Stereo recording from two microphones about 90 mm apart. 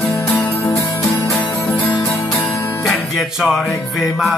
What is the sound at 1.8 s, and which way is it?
Music, 25° left (ahead or behind).